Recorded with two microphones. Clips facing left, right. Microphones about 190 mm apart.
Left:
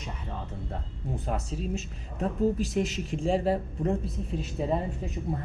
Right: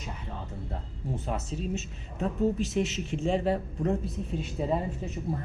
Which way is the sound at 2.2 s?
40° left (ahead or behind).